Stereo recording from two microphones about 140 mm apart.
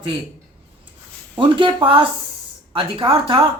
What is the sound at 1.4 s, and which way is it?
Speech, 35° right (ahead or behind).